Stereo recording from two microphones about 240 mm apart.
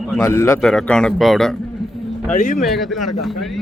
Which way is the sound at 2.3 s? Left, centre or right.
Left.